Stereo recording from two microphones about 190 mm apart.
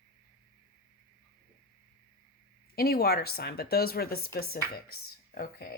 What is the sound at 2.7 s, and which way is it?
A woman's voice, 55° left (ahead or behind).